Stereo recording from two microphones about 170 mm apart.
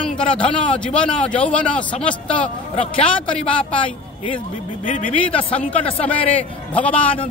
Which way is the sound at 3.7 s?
30° left (ahead or behind).